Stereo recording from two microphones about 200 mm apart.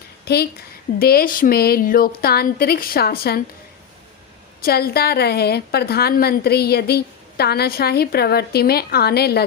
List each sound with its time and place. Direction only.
0.3 s a woman's voice: 55° left (ahead or behind)
4.6 s a woman's voice: 50° left (ahead or behind)